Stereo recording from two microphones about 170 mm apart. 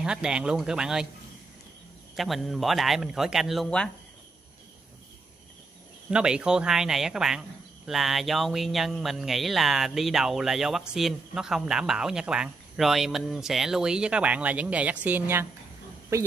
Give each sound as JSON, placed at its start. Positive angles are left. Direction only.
{"t": 0.0, "sound": "speech", "side_deg": -5}
{"t": 2.1, "sound": "speech", "side_deg": 0}
{"t": 6.0, "sound": "speech", "side_deg": -5}